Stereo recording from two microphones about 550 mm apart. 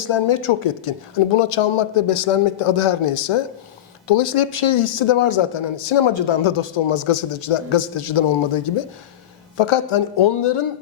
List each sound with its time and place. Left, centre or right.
0.0 s speech: left